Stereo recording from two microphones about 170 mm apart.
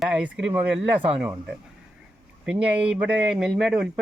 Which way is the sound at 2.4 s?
5° right (ahead or behind).